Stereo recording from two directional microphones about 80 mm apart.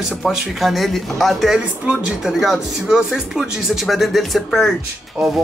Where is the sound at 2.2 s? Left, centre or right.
Centre.